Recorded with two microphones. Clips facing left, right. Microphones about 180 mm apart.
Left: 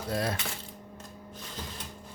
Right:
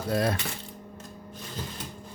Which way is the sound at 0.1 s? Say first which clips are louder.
Right 5 dB; 60° right (ahead or behind).